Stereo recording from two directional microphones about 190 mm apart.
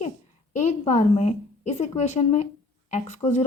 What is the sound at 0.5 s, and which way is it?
Speech, 35° left (ahead or behind).